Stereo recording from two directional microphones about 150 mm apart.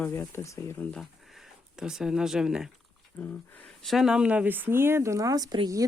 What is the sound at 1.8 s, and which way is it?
Speech, 5° right (ahead or behind).